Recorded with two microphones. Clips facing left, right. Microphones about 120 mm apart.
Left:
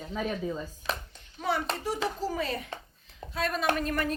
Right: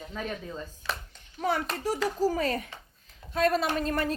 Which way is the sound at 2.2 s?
45° right (ahead or behind).